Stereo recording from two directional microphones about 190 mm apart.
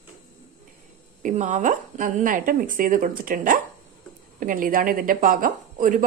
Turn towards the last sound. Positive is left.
turn(degrees=-45)  # may be behind; listen again after turning